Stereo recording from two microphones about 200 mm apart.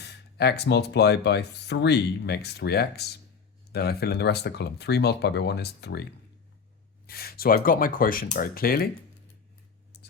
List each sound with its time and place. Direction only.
0.0 s speech: 55° left (ahead or behind)
7.1 s speech: 50° left (ahead or behind)